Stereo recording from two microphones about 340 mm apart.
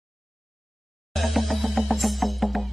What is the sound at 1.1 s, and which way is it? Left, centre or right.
Music, centre.